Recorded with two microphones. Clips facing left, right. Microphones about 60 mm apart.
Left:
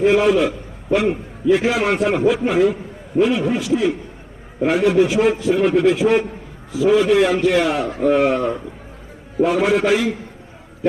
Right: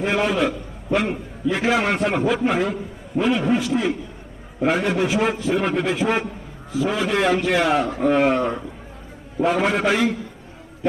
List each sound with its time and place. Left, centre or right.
0.0 s a man's voice: centre